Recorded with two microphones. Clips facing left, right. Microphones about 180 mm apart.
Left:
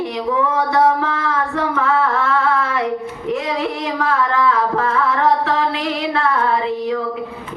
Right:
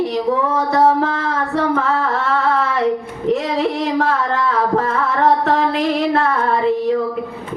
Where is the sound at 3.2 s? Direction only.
35° right (ahead or behind).